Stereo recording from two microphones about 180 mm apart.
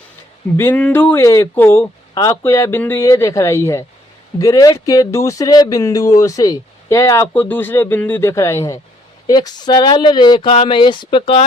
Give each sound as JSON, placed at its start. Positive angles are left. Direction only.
{"t": 0.5, "sound": "speech", "side_deg": 10}